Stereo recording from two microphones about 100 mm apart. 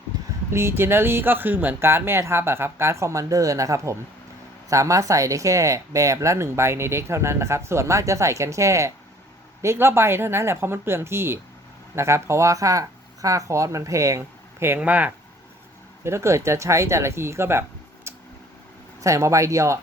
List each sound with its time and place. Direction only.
0.5 s speech: 25° right (ahead or behind)
16.0 s speech: 25° right (ahead or behind)